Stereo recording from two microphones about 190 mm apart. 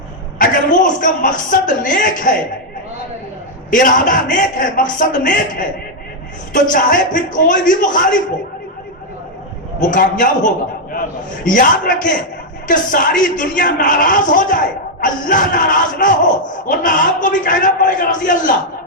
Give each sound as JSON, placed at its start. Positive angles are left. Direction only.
{"t": 0.3, "sound": "a man's voice", "side_deg": 45}
{"t": 3.7, "sound": "a man's voice", "side_deg": 45}
{"t": 9.8, "sound": "a man's voice", "side_deg": 45}